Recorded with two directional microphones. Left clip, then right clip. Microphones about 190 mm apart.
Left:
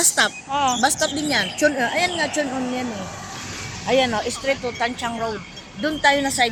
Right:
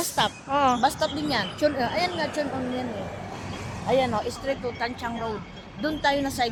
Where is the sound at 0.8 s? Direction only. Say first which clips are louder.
Left 4 dB; 45° left (ahead or behind).